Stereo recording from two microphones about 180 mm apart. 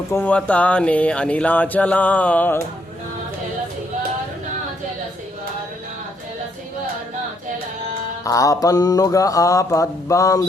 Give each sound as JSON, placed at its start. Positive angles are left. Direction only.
{"t": 0.1, "sound": "speech", "side_deg": 10}
{"t": 8.2, "sound": "mantra", "side_deg": 20}